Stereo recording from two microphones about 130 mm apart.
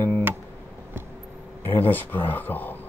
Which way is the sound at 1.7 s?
15° left (ahead or behind).